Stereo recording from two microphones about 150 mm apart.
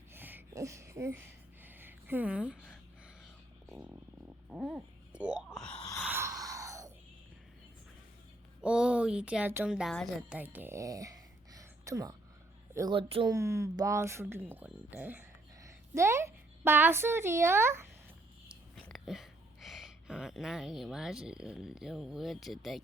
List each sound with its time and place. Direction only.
0.1 s a sound: 15° right (ahead or behind)
3.7 s music: 5° right (ahead or behind)
4.4 s speech: 5° right (ahead or behind)
6.0 s a sound: 15° right (ahead or behind)
8.6 s speech: 5° right (ahead or behind); by 13.3 s 35° right (ahead or behind)
13.3 s speech: 20° right (ahead or behind)
18.4 s speech: centre (ahead or behind)